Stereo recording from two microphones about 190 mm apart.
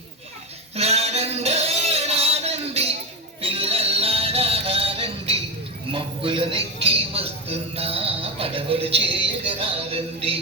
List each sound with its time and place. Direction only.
0.8 s music: 35° right (ahead or behind)
5.9 s a sound: 30° right (ahead or behind)
6.8 s music: 30° right (ahead or behind)